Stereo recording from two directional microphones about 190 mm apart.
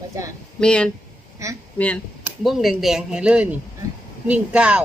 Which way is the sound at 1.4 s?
15° right (ahead or behind).